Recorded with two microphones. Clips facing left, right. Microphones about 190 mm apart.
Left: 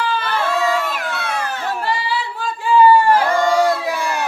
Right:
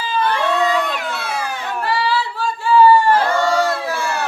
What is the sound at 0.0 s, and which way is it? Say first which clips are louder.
Crowd: right 1 dB; 70° left (ahead or behind).